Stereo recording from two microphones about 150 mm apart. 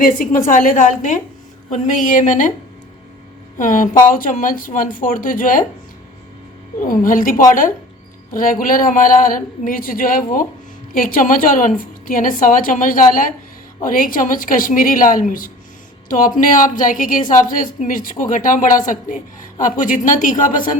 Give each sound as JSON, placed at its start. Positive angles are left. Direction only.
{"t": 0.0, "sound": "a woman's voice", "side_deg": 65}
{"t": 3.6, "sound": "a woman's voice", "side_deg": 60}
{"t": 6.8, "sound": "a woman's voice", "side_deg": 65}